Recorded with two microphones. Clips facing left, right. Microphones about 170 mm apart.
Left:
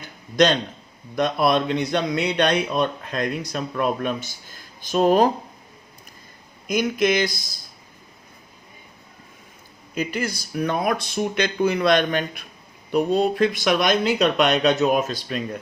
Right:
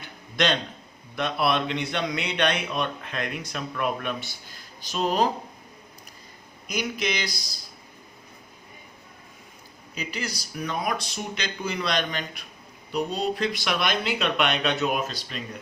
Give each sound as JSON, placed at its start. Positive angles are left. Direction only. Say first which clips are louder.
{"t": 0.0, "sound": "a sound", "louder": "left 8 dB", "side_deg": 40}
{"t": 1.1, "sound": "speech", "louder": "left 5 dB", "side_deg": 40}
{"t": 6.7, "sound": "speech", "louder": "left 8 dB", "side_deg": 50}
{"t": 9.9, "sound": "speech", "louder": "left 8 dB", "side_deg": 50}